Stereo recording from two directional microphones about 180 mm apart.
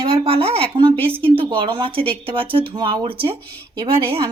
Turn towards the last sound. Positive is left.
turn(degrees=-20)  # may be behind; listen again after turning